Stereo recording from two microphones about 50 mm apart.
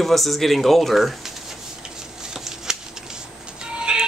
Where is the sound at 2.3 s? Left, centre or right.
Centre.